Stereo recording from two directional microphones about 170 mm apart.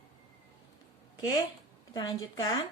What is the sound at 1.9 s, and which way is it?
Speech, 25° left (ahead or behind).